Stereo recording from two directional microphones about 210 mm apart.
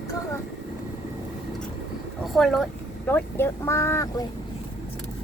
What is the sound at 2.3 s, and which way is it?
Speech, centre (ahead or behind).